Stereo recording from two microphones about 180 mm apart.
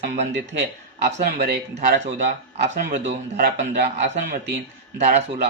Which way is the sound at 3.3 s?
65° right (ahead or behind).